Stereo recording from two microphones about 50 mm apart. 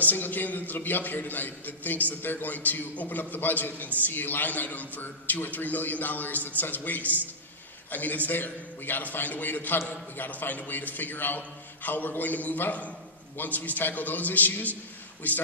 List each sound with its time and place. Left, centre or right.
0.0 s a man's voice: left